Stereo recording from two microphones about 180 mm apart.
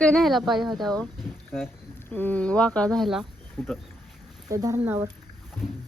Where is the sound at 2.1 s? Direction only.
10° left (ahead or behind).